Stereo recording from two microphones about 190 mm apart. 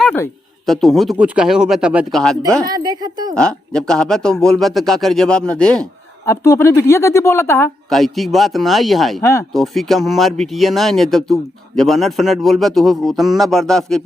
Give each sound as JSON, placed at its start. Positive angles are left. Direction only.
{"t": 0.0, "sound": "speech", "side_deg": 5}
{"t": 2.6, "sound": "a woman's voice", "side_deg": -20}
{"t": 3.3, "sound": "speech", "side_deg": 5}
{"t": 6.3, "sound": "speech", "side_deg": 15}
{"t": 7.9, "sound": "speech", "side_deg": 0}
{"t": 9.2, "sound": "speech", "side_deg": 15}
{"t": 9.6, "sound": "speech", "side_deg": 0}